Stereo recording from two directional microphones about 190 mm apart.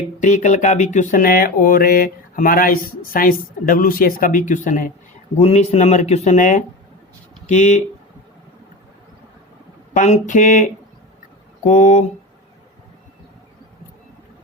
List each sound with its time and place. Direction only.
0.2 s mantra: 40° left (ahead or behind)
5.4 s speech: 35° left (ahead or behind)
9.9 s speech: 40° left (ahead or behind)